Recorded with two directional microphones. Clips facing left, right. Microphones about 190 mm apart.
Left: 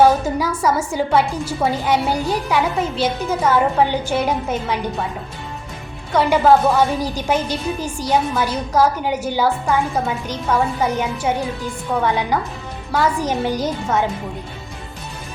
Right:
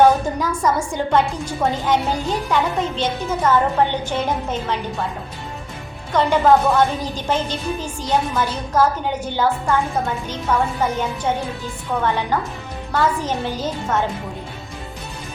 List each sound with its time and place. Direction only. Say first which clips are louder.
0.3 s a woman's voice: left 1 dB; 10° left (ahead or behind)
6.1 s a woman's voice: left 1 dB; 10° left (ahead or behind)
10.8 s a woman's voice: left 1 dB; 10° left (ahead or behind)